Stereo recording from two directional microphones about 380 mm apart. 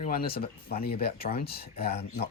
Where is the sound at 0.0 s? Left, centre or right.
Left.